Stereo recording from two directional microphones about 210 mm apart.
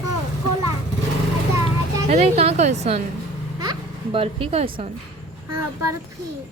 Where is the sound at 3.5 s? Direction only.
20° right (ahead or behind).